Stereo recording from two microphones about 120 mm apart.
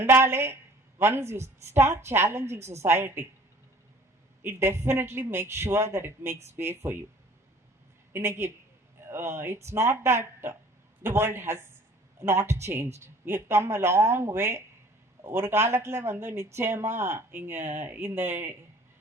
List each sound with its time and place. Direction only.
0.0 s speech: 20° right (ahead or behind)
4.4 s speech: 20° right (ahead or behind)
8.1 s speech: 20° right (ahead or behind)